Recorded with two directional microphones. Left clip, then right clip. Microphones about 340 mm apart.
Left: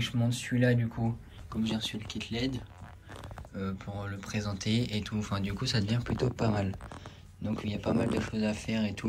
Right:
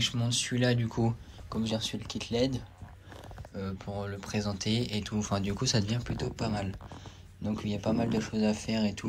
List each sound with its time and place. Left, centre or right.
0.0 s speech: centre